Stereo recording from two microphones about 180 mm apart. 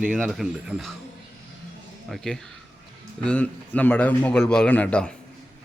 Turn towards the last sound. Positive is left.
turn(degrees=5)  # may be behind; listen again after turning